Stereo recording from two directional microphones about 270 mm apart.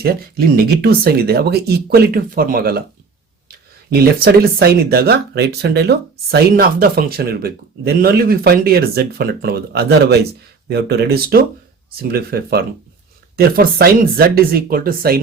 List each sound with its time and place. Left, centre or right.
0.0 s speech: right
3.9 s speech: right